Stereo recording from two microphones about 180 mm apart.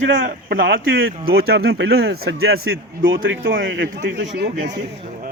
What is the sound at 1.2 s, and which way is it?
Speech, 60° right (ahead or behind).